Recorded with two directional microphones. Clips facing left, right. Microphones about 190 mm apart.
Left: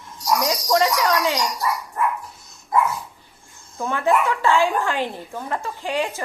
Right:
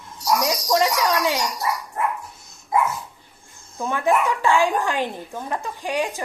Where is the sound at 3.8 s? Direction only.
15° right (ahead or behind).